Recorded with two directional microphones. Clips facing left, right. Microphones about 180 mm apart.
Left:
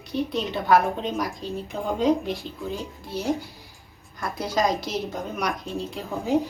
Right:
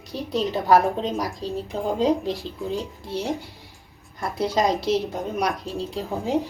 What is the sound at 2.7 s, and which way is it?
Speech, centre (ahead or behind).